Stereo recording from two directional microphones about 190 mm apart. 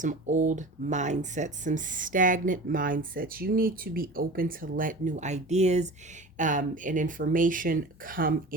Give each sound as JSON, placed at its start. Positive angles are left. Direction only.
{"t": 0.0, "sound": "speech", "side_deg": -40}